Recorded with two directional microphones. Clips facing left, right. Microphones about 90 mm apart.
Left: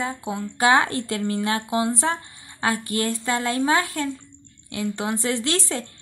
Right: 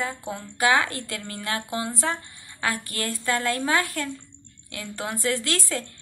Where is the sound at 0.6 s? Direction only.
30° left (ahead or behind).